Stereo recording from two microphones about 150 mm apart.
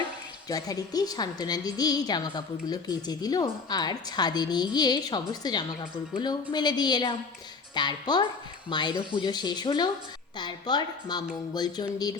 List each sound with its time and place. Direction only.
0.4 s a woman's voice: 25° left (ahead or behind)